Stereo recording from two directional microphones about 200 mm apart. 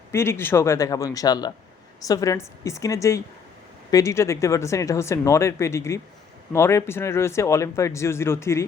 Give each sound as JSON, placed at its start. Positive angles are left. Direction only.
{"t": 0.1, "sound": "speech", "side_deg": 10}